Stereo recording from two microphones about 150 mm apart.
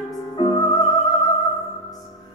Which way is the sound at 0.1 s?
25° left (ahead or behind).